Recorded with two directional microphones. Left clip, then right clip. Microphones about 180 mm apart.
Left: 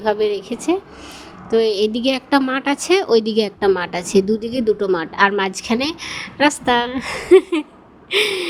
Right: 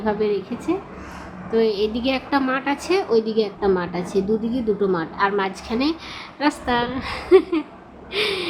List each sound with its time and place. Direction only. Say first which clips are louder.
0.0 s a woman's voice: left 4 dB; 35° left (ahead or behind)
8.1 s gasp: left 5 dB; 45° left (ahead or behind)